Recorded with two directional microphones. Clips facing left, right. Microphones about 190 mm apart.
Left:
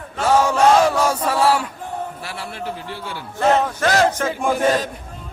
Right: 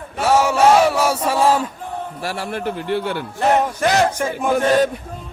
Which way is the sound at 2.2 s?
45° right (ahead or behind).